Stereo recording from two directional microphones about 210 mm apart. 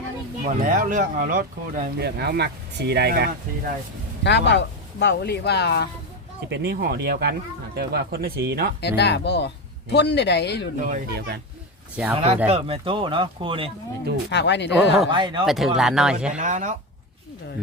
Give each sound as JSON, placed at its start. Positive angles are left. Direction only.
{"t": 0.4, "sound": "speech", "side_deg": -40}
{"t": 4.2, "sound": "speech", "side_deg": 55}
{"t": 6.5, "sound": "speech", "side_deg": -50}
{"t": 8.8, "sound": "speech", "side_deg": 55}
{"t": 10.8, "sound": "speech", "side_deg": -40}
{"t": 14.3, "sound": "speech", "side_deg": 55}
{"t": 15.1, "sound": "speech", "side_deg": -20}
{"t": 15.4, "sound": "speech", "side_deg": 0}
{"t": 16.4, "sound": "speech", "side_deg": -35}